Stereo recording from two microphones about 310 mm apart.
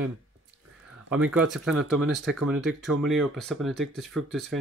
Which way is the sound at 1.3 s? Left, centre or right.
Centre.